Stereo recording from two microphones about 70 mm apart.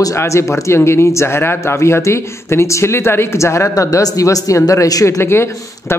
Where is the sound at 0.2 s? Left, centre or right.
Left.